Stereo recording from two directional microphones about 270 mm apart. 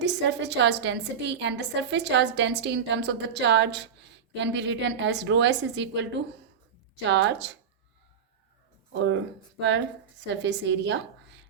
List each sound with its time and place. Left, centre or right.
0.0 s a woman's voice: right
8.9 s a woman's voice: right